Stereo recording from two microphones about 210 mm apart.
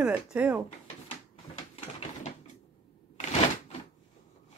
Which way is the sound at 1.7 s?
30° left (ahead or behind).